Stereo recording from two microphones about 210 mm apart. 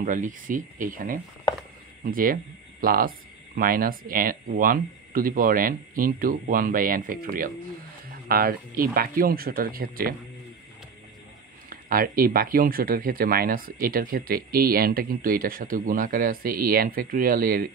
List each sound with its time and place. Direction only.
0.0 s speech: 40° right (ahead or behind)
11.7 s speech: 45° right (ahead or behind)